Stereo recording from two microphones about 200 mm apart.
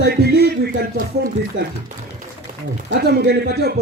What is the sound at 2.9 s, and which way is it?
Speech, 55° right (ahead or behind).